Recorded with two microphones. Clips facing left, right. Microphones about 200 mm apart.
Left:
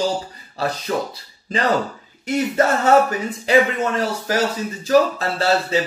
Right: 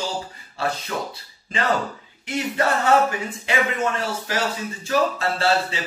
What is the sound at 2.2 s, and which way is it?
Speech, 40° left (ahead or behind).